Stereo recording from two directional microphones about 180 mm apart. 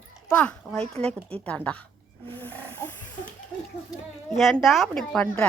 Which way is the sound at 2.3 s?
10° left (ahead or behind).